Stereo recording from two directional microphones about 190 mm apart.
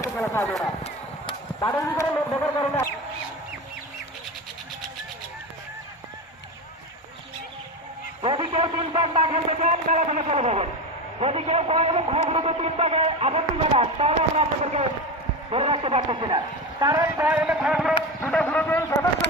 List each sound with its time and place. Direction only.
0.2 s speech: 5° left (ahead or behind)
1.5 s speech: 15° left (ahead or behind)
8.2 s a man's voice: 25° right (ahead or behind)
17.4 s speech: 5° right (ahead or behind)
18.2 s speech: 10° left (ahead or behind)